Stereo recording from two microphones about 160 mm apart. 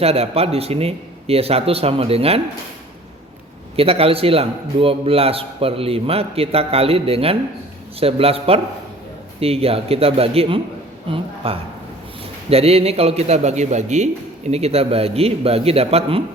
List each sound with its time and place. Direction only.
0.0 s a man's voice: 40° right (ahead or behind)
3.8 s a man's voice: 35° right (ahead or behind)